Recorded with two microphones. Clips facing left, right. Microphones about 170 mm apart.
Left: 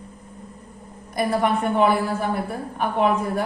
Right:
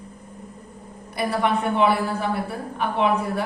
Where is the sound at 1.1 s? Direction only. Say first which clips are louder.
Left 1 dB; 45° left (ahead or behind).